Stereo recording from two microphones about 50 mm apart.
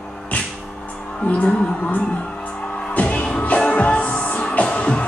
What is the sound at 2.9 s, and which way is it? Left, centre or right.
Music, left.